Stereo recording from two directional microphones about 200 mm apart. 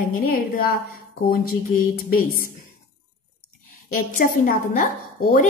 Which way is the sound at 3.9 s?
45° left (ahead or behind).